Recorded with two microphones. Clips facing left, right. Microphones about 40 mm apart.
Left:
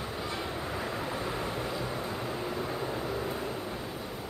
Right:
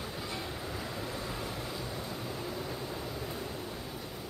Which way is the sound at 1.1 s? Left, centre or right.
Left.